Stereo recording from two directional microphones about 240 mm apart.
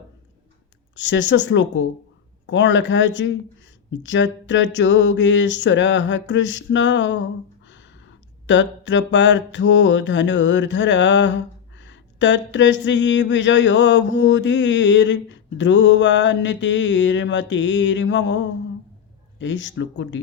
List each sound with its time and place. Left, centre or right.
0.9 s speech: left